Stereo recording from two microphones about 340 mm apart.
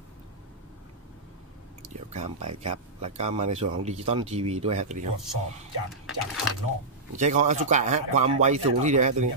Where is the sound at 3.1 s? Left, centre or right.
Centre.